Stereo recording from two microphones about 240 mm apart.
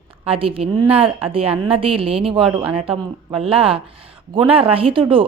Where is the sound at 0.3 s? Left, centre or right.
Right.